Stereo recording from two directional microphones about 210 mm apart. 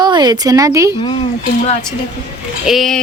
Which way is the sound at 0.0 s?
20° right (ahead or behind).